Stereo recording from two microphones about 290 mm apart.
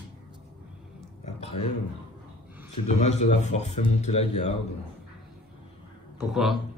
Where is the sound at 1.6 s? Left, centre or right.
Left.